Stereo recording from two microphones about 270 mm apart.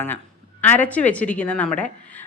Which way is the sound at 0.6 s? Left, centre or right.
Centre.